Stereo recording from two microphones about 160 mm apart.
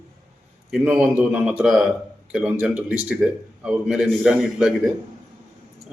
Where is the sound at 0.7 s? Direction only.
10° right (ahead or behind).